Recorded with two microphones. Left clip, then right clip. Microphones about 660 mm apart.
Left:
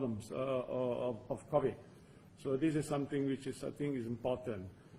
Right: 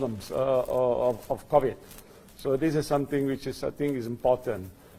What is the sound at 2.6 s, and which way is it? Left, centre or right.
Speech, right.